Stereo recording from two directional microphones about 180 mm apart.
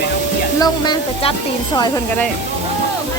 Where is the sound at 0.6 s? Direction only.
25° left (ahead or behind).